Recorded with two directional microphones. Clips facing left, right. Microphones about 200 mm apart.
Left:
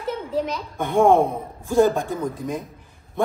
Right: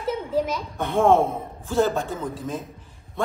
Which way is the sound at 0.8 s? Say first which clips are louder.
Left 2 dB; 15° left (ahead or behind).